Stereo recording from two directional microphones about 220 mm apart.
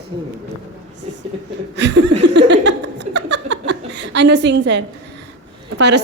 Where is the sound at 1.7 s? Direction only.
55° right (ahead or behind).